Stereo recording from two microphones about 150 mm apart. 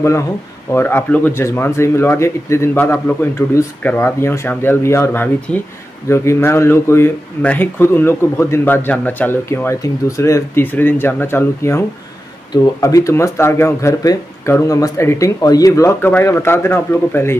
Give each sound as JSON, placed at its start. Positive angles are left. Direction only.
{"t": 0.7, "sound": "speech", "side_deg": 15}
{"t": 12.8, "sound": "speech", "side_deg": 20}